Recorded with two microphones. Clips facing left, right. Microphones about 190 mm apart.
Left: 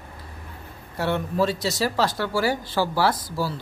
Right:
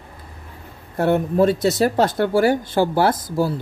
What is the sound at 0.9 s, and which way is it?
Speech, 50° right (ahead or behind).